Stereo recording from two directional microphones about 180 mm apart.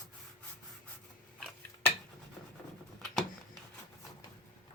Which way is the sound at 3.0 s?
Centre (ahead or behind).